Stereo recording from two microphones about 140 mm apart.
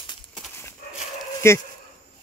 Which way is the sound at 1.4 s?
20° left (ahead or behind).